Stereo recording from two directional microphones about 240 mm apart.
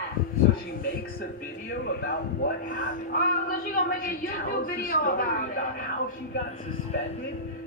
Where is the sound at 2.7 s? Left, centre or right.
Left.